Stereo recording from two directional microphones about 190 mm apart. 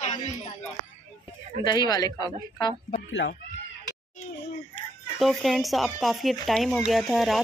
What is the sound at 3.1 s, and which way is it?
Speech, 90° left.